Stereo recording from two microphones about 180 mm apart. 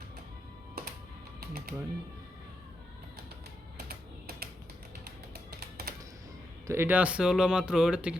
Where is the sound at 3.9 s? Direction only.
60° right (ahead or behind).